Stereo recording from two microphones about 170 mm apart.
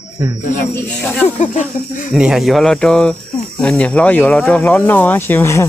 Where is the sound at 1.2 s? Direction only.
45° left (ahead or behind).